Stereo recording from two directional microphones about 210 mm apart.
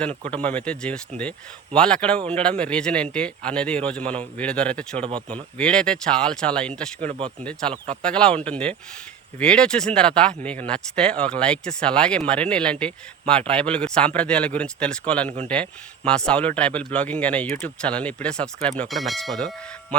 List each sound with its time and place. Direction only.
0.4 s speech: 5° left (ahead or behind)
4.9 s speech: 25° right (ahead or behind)
5.3 s speech: 5° left (ahead or behind)
7.1 s speech: 25° right (ahead or behind)
8.0 s speech: 5° left (ahead or behind)